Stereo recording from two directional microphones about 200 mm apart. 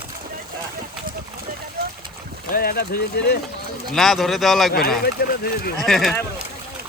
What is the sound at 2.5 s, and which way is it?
Speech, 50° left (ahead or behind).